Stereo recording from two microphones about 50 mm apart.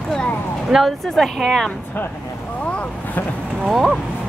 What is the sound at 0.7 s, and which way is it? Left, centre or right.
Speech, centre.